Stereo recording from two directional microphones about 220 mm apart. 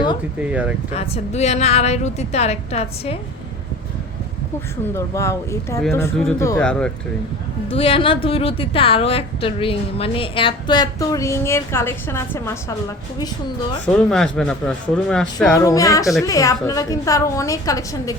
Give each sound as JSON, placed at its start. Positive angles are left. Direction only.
{"t": 0.9, "sound": "a woman's voice", "side_deg": 30}
{"t": 4.9, "sound": "a woman's voice", "side_deg": 15}
{"t": 7.7, "sound": "a woman's voice", "side_deg": 25}
{"t": 13.8, "sound": "speech", "side_deg": 5}
{"t": 15.5, "sound": "a woman's voice", "side_deg": 15}